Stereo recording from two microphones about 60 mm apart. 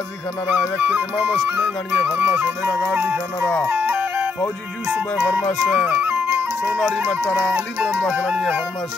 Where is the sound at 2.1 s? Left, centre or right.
Centre.